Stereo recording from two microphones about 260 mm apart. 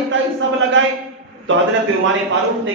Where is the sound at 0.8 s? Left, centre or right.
Right.